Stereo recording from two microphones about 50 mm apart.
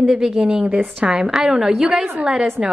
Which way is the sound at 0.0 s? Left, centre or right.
Centre.